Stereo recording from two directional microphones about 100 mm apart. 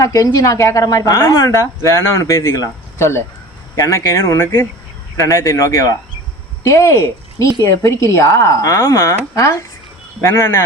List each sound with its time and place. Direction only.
0.0 s speech: 35° left (ahead or behind)